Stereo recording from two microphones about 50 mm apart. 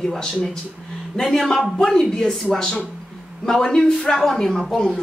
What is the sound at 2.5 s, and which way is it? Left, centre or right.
Speech, left.